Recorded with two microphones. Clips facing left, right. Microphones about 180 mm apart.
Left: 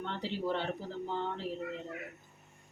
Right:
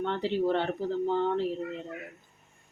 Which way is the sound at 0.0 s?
60° right (ahead or behind).